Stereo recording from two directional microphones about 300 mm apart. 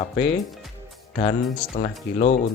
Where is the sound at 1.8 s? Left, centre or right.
Left.